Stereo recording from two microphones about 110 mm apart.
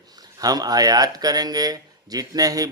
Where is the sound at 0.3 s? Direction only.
35° right (ahead or behind).